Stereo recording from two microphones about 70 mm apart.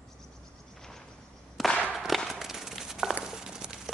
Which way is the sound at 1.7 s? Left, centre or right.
Centre.